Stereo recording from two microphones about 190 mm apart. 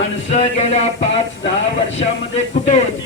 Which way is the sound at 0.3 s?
35° left (ahead or behind).